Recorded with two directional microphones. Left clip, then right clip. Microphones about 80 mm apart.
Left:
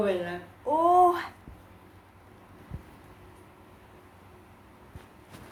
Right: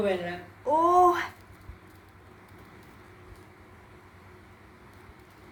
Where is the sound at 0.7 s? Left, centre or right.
Right.